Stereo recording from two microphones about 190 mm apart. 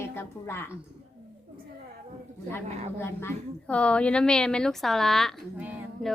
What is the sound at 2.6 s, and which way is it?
Speech, 35° right (ahead or behind).